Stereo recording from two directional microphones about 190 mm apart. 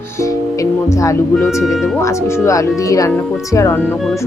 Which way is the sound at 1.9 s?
15° left (ahead or behind).